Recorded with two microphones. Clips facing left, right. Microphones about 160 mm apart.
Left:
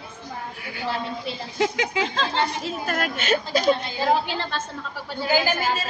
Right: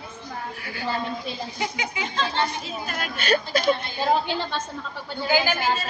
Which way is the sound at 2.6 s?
60° left (ahead or behind).